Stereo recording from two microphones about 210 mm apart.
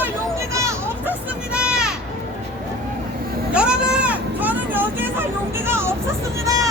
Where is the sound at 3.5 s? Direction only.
5° right (ahead or behind).